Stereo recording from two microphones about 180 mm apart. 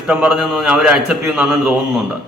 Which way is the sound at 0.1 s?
5° right (ahead or behind).